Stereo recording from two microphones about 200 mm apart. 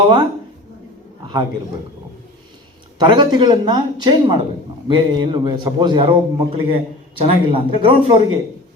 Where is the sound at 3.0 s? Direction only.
20° right (ahead or behind).